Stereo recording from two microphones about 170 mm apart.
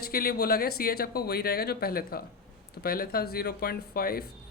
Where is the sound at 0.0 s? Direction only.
65° left (ahead or behind).